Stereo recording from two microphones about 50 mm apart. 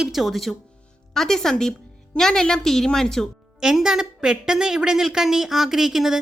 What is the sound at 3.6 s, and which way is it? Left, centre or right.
A woman's voice, centre.